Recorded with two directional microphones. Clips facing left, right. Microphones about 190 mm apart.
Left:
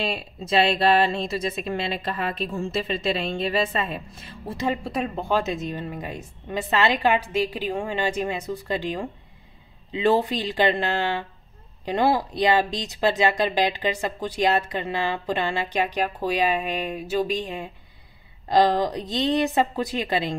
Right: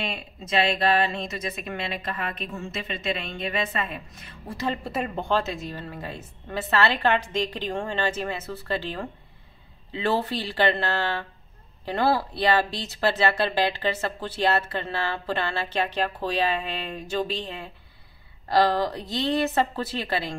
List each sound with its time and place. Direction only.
0.0 s speech: 30° left (ahead or behind)
4.8 s speech: centre (ahead or behind)
5.3 s a woman's voice: 20° left (ahead or behind)